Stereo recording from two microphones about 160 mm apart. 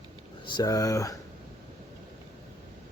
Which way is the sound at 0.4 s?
25° left (ahead or behind).